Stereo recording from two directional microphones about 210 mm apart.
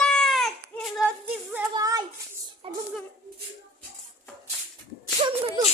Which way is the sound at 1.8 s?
15° right (ahead or behind).